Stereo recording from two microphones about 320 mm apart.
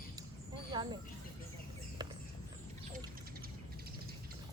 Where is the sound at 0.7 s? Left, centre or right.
Centre.